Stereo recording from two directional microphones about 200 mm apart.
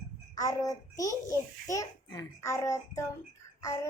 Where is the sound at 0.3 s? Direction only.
15° left (ahead or behind).